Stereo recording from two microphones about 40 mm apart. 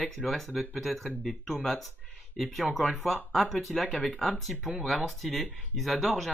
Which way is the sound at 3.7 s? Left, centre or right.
Centre.